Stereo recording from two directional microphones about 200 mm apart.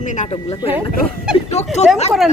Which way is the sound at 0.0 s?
40° left (ahead or behind).